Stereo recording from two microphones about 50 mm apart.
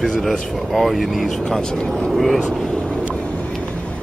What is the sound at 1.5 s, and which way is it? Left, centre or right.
Speech, centre.